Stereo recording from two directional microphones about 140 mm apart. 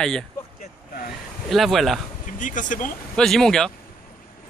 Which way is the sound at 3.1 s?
5° left (ahead or behind).